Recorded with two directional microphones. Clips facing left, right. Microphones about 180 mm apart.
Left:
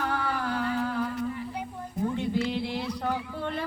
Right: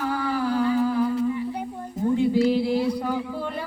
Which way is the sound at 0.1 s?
10° right (ahead or behind).